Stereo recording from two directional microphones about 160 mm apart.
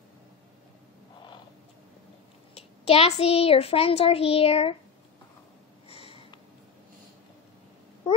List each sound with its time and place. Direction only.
2.5 s a child's voice: 40° left (ahead or behind)
5.9 s snort: 35° left (ahead or behind)